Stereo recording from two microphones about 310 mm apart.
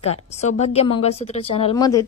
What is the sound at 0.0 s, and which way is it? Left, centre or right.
A woman's voice, left.